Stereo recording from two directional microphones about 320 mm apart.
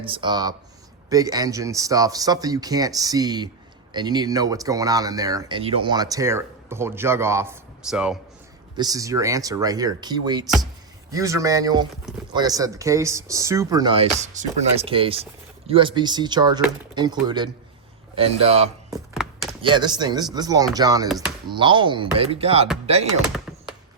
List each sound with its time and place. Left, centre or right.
0.1 s speech: centre
19.1 s a sound: centre
19.6 s speech: centre
23.3 s typing: centre